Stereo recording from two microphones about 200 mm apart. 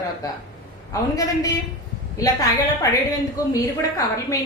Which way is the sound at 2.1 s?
15° left (ahead or behind).